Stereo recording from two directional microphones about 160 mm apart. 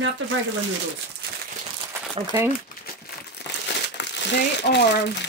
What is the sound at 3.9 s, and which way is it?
Speech, 90° left.